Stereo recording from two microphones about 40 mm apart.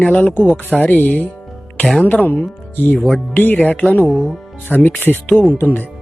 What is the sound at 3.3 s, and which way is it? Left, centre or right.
Speech, left.